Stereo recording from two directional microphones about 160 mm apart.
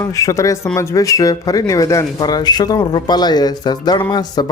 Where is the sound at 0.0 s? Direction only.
20° left (ahead or behind).